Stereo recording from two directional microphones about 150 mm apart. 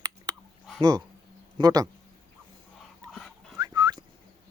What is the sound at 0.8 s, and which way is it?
Speech, 25° right (ahead or behind).